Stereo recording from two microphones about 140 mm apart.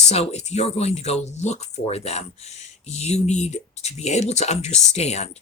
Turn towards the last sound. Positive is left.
turn(degrees=50)  # may be behind; listen again after turning